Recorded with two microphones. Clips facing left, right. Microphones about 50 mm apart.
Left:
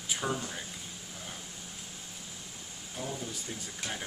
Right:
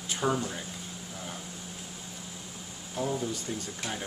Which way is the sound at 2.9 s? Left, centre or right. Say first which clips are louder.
Right 7 dB; centre.